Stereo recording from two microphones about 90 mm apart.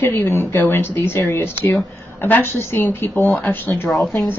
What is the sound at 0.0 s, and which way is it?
Speech, 25° left (ahead or behind).